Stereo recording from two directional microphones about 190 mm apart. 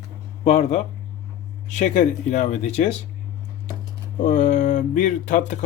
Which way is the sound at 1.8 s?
40° left (ahead or behind).